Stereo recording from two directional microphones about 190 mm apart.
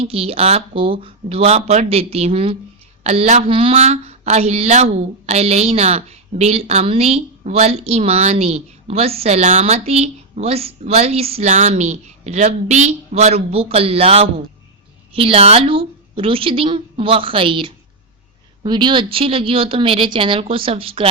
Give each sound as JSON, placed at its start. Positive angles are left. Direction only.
{"t": 0.0, "sound": "a woman's voice", "side_deg": -30}